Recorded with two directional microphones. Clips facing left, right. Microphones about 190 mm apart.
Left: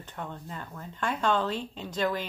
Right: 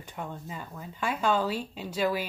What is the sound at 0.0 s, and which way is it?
Speech, 10° right (ahead or behind).